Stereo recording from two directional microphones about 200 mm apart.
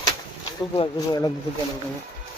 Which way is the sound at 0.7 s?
25° left (ahead or behind).